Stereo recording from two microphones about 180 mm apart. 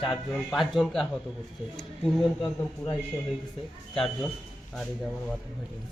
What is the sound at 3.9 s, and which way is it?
Speech, centre (ahead or behind).